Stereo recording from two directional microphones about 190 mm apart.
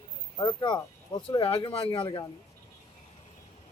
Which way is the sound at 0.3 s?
25° left (ahead or behind).